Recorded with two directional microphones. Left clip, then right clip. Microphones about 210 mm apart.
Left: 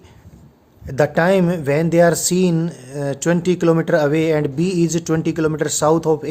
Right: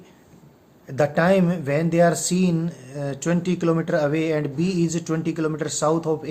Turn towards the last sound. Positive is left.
turn(degrees=45)  # may be behind; listen again after turning